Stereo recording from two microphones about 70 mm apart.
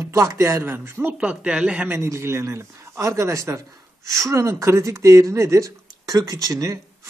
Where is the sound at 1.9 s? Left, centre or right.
Right.